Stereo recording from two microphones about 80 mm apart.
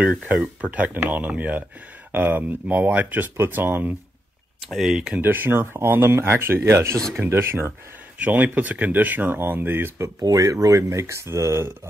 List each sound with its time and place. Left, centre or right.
0.0 s speech: centre
4.6 s speech: centre
5.2 s speech: right
10.2 s speech: right